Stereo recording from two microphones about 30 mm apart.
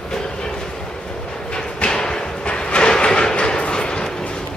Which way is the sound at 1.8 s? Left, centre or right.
Left.